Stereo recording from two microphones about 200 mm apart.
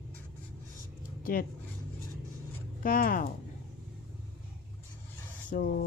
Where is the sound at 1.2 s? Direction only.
45° left (ahead or behind).